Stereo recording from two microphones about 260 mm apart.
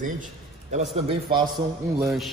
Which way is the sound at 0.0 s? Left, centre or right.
Right.